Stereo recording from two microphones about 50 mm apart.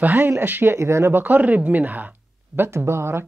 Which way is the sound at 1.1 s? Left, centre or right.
Right.